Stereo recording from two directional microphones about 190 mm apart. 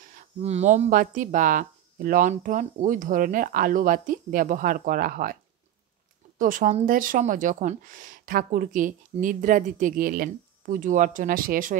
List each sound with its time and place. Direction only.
0.1 s speech: 35° right (ahead or behind)